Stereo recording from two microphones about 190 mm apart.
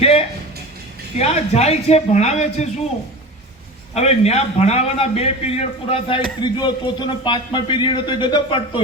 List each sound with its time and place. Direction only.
0.0 s a sound: 30° left (ahead or behind)
1.2 s a man's voice: 35° left (ahead or behind)
3.9 s a man's voice: 35° left (ahead or behind)